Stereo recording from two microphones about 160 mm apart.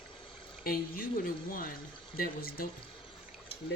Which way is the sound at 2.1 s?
70° left (ahead or behind).